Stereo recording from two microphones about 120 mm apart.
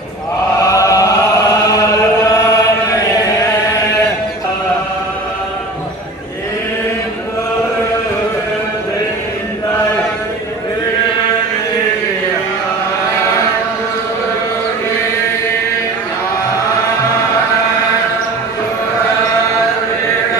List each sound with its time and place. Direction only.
0.6 s chant: 25° left (ahead or behind)